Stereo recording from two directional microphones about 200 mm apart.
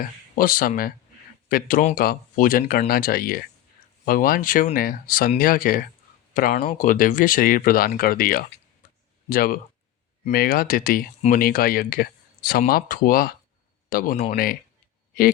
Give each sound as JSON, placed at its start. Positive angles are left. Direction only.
{"t": 0.3, "sound": "speech", "side_deg": 45}